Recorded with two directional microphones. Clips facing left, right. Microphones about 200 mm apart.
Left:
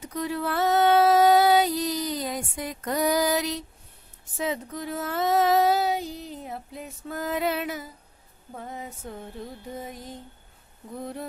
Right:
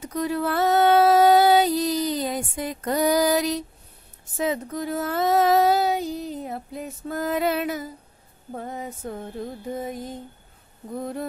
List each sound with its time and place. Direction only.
0.1 s female singing: 45° right (ahead or behind)
4.4 s child singing: 45° right (ahead or behind)
8.5 s a sound: 45° right (ahead or behind)